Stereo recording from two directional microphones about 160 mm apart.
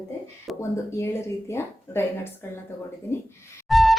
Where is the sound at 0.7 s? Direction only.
15° left (ahead or behind).